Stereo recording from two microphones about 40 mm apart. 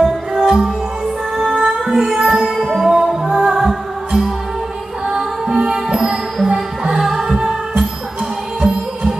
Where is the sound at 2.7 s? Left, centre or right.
Centre.